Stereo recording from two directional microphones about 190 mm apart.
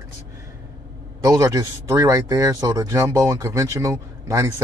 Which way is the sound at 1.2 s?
15° right (ahead or behind).